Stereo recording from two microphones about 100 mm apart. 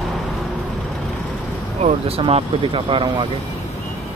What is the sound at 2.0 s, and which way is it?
Speech, 75° right (ahead or behind).